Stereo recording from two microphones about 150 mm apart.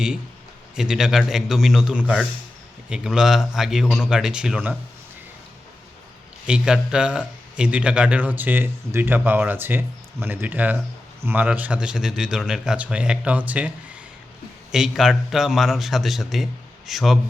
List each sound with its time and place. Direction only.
0.8 s a man's voice: 5° right (ahead or behind)
6.5 s a man's voice: 5° right (ahead or behind)